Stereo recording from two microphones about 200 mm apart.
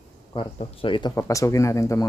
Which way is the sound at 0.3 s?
25° left (ahead or behind).